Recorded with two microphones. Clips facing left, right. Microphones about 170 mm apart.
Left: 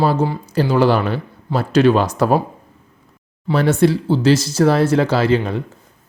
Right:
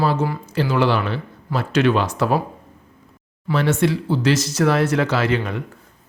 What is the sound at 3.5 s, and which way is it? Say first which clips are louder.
Speech: left 4 dB; 35° left (ahead or behind).